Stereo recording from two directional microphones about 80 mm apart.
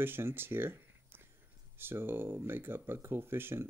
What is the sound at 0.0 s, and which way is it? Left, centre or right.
Speech, right.